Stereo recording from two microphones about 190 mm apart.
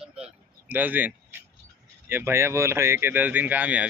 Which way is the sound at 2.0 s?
10° right (ahead or behind).